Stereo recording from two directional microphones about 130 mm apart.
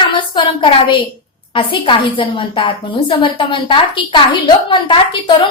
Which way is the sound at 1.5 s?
40° left (ahead or behind).